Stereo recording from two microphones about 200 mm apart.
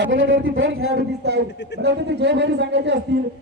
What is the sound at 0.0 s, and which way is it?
A man's voice, 70° right (ahead or behind).